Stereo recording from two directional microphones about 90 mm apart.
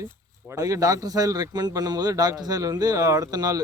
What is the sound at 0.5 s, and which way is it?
A man's voice, 40° right (ahead or behind).